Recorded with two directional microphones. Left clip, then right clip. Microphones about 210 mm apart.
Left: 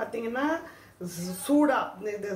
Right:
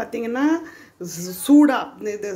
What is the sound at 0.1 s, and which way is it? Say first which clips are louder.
Speech: right 7 dB; 50° right (ahead or behind).